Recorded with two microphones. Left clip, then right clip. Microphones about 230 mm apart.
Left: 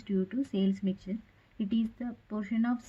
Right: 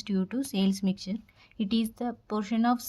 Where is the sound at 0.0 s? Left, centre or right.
Right.